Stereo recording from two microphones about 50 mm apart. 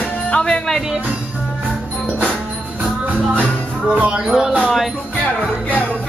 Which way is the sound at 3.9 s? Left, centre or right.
Right.